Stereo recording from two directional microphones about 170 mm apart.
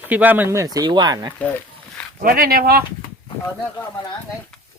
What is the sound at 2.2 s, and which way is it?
Speech, 60° right (ahead or behind).